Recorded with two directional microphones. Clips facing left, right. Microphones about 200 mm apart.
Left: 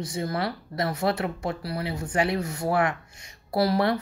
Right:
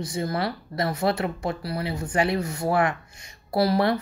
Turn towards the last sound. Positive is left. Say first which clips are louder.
# right 1 dB
turn(degrees=-30)  # may be behind; listen again after turning